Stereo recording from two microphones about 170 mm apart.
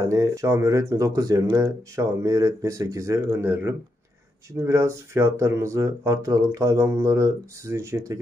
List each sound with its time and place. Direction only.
0.0 s speech: 15° right (ahead or behind)